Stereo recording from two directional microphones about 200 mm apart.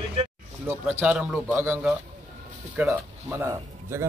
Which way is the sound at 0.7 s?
10° right (ahead or behind).